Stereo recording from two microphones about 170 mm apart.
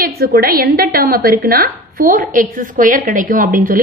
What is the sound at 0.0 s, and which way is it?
A woman's voice, 60° right (ahead or behind).